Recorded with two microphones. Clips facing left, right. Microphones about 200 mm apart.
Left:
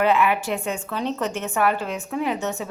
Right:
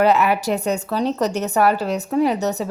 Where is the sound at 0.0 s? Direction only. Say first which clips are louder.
Right 3 dB; 40° right (ahead or behind).